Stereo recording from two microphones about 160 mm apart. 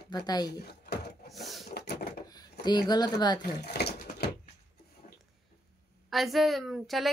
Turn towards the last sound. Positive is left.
turn(degrees=0)  # may be behind; listen again after turning